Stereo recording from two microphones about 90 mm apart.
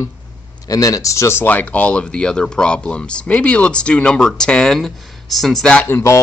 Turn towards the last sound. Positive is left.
turn(degrees=30)  # may be behind; listen again after turning